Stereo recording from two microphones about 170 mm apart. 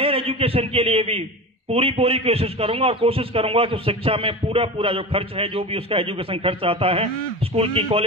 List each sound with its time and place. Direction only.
0.0 s a man's voice: 35° right (ahead or behind)